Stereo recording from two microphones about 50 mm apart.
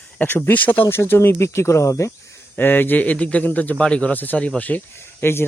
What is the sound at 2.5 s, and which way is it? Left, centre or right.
Speech, left.